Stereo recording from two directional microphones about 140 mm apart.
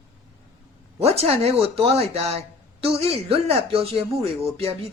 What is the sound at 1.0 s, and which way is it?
Speech, 45° right (ahead or behind).